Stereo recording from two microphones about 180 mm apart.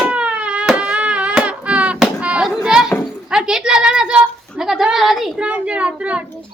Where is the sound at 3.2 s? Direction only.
5° right (ahead or behind).